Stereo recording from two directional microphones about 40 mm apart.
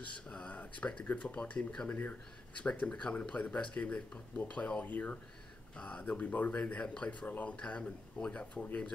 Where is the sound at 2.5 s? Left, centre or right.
Left.